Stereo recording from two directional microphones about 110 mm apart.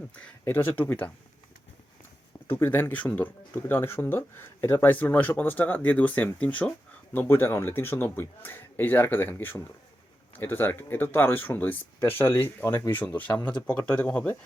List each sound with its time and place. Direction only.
0.1 s speech: 20° left (ahead or behind)
2.5 s speech: 20° left (ahead or behind)